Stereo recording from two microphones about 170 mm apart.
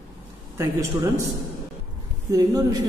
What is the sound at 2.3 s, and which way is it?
Speech, 20° right (ahead or behind).